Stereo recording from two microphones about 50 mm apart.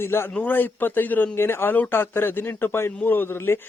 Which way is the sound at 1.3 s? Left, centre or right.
Left.